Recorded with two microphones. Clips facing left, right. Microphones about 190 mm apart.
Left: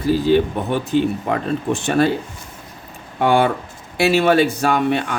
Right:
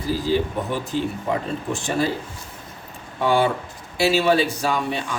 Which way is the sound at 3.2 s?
60° left (ahead or behind).